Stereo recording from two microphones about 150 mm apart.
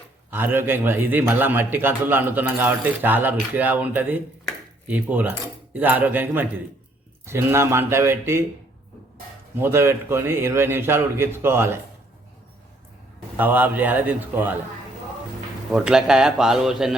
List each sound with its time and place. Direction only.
0.3 s a man's voice: 15° right (ahead or behind)
9.6 s a man's voice: 15° right (ahead or behind)
13.3 s a man's voice: 10° right (ahead or behind)
15.7 s a man's voice: 5° right (ahead or behind)